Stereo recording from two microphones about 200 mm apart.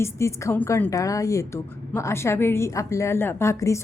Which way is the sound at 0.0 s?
15° left (ahead or behind).